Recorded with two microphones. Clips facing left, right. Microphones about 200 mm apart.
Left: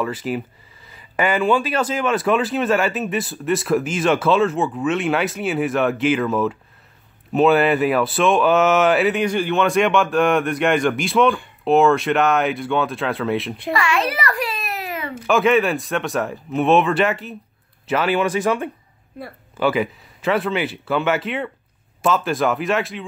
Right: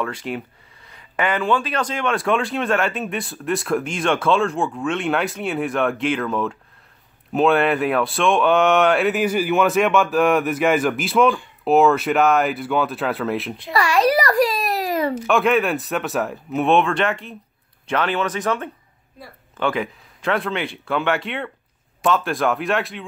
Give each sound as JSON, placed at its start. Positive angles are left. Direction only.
{"t": 0.0, "sound": "speech", "side_deg": 5}
{"t": 13.7, "sound": "a child's voice", "side_deg": -40}
{"t": 15.2, "sound": "speech", "side_deg": 0}